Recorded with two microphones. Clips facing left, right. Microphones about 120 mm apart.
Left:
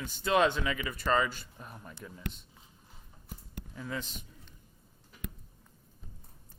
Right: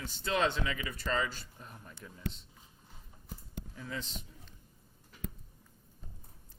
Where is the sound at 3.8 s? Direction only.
65° left (ahead or behind).